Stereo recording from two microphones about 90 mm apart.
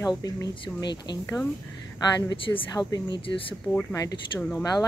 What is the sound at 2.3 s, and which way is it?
Speech, 50° left (ahead or behind).